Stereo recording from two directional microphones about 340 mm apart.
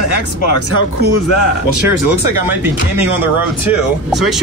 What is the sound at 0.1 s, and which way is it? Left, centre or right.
Speech, left.